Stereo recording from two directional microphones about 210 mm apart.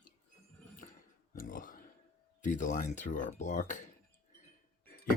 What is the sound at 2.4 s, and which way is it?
Speech, 40° left (ahead or behind).